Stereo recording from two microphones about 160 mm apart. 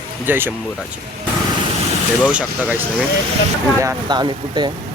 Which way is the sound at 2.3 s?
5° right (ahead or behind).